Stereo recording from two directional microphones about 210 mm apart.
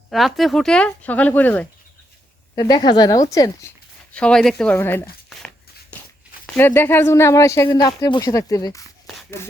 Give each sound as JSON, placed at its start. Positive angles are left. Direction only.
{"t": 0.1, "sound": "speech", "side_deg": 0}
{"t": 2.6, "sound": "a woman's voice", "side_deg": 20}
{"t": 4.1, "sound": "speech", "side_deg": 5}